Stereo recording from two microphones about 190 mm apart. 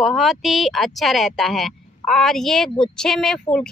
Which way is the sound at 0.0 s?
Centre (ahead or behind).